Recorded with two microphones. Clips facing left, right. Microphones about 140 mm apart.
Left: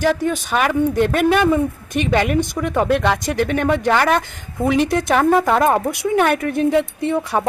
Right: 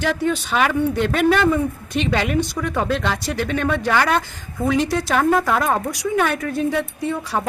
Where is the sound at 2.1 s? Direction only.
50° left (ahead or behind).